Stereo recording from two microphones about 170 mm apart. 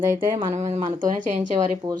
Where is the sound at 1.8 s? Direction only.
25° right (ahead or behind).